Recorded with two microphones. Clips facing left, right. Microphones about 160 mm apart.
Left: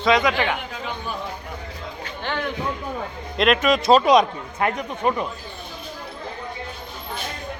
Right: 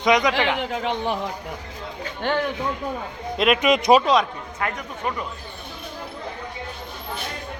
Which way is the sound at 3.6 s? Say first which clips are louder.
Right 1 dB; 20° right (ahead or behind).